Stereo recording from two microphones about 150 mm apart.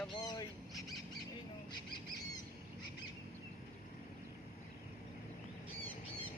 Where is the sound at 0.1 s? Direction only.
30° left (ahead or behind).